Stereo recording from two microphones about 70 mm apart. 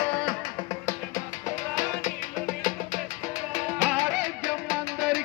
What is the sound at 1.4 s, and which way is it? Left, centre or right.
Music, left.